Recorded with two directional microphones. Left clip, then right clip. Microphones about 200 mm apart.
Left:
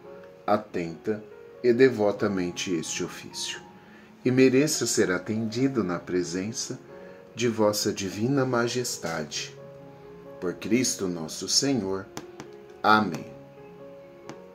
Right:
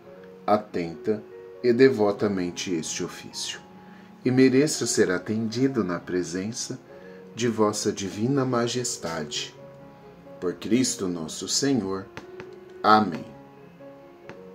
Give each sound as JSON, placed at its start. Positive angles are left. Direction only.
{"t": 0.5, "sound": "speech", "side_deg": -15}